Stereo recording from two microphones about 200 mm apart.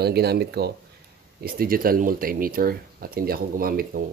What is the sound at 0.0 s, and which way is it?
Speech, 55° right (ahead or behind).